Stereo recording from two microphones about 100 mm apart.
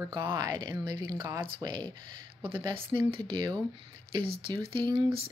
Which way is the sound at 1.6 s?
45° right (ahead or behind).